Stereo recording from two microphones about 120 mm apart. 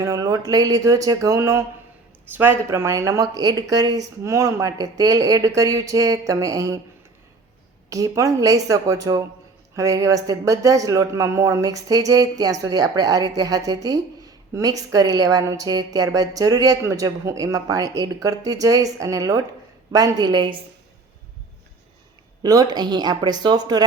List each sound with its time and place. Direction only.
0.0 s speech: 30° right (ahead or behind)
7.9 s speech: 30° right (ahead or behind)
22.4 s speech: 35° right (ahead or behind)